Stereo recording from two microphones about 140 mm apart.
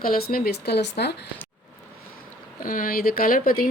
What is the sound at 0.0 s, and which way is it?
Speech, 90° left.